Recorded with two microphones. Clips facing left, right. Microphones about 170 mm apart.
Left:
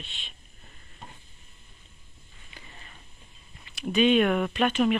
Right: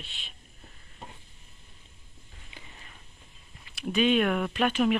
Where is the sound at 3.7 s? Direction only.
5° right (ahead or behind).